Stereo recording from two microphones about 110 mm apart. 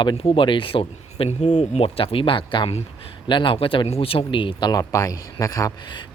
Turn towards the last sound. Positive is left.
turn(degrees=30)  # may be behind; listen again after turning